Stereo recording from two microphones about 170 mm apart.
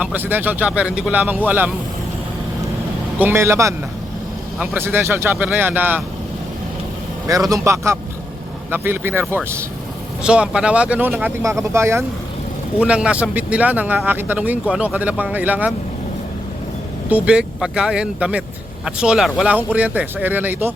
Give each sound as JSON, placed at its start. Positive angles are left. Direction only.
{"t": 0.0, "sound": "speech", "side_deg": -10}
{"t": 3.2, "sound": "speech", "side_deg": -15}
{"t": 7.3, "sound": "a man's voice", "side_deg": -20}
{"t": 17.1, "sound": "speech", "side_deg": -5}